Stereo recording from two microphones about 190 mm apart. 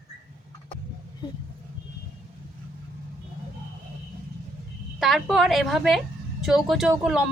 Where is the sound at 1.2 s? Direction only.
25° left (ahead or behind).